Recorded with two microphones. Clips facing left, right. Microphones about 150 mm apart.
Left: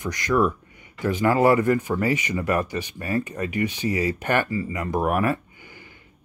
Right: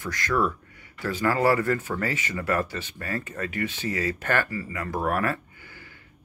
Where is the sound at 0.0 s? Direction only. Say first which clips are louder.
Left 4 dB; 15° left (ahead or behind).